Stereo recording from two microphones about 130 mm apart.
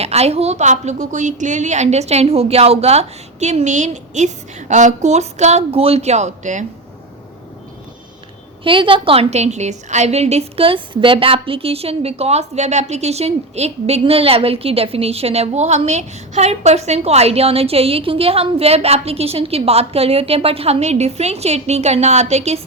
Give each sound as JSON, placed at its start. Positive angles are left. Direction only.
{"t": 0.0, "sound": "a woman's voice", "side_deg": -55}
{"t": 8.6, "sound": "a woman's voice", "side_deg": -40}